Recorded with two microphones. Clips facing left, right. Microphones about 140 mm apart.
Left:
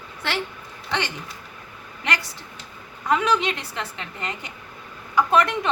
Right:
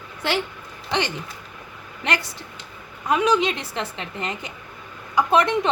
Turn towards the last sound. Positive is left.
turn(degrees=-20)  # may be behind; listen again after turning